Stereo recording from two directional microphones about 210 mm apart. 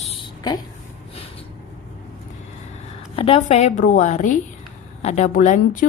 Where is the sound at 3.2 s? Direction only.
30° left (ahead or behind).